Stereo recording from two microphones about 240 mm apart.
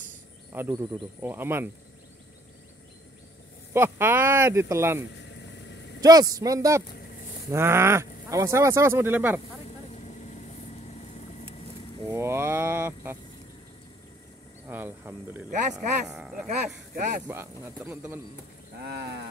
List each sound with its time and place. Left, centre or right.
0.6 s speech: centre
3.7 s speech: centre
5.3 s vehicle: left
5.9 s speech: centre
9.9 s vehicle: left
12.1 s speech: centre
14.7 s speech: centre
16.4 s speech: right
17.3 s speech: centre